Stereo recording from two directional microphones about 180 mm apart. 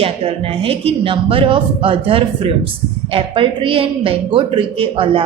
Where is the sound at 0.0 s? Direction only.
30° right (ahead or behind).